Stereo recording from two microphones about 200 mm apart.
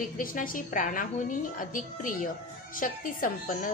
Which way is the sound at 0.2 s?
45° left (ahead or behind).